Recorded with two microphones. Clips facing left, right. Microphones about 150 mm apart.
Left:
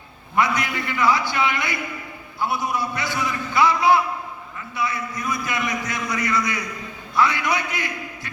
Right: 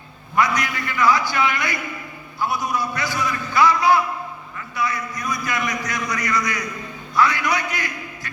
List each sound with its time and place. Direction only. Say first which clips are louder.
0.3 s a man's voice: right 1 dB; 25° left (ahead or behind)